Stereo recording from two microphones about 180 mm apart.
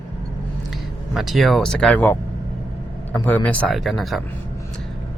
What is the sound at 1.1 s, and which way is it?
Speech, centre (ahead or behind).